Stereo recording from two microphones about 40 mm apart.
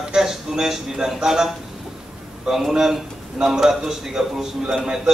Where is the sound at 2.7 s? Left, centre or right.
Centre.